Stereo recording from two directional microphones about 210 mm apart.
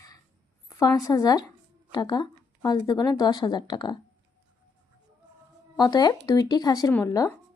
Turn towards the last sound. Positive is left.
turn(degrees=15)  # may be behind; listen again after turning